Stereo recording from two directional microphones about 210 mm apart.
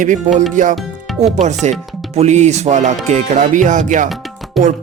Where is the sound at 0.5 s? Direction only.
35° right (ahead or behind).